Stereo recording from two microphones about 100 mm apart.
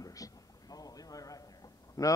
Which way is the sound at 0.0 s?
35° left (ahead or behind).